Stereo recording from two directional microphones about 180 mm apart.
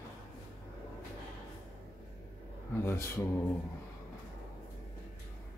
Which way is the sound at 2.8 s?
15° left (ahead or behind).